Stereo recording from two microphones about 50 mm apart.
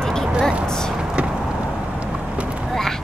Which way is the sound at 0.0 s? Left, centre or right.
Centre.